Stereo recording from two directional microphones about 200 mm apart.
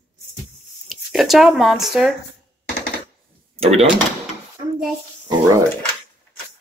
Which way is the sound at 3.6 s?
30° right (ahead or behind).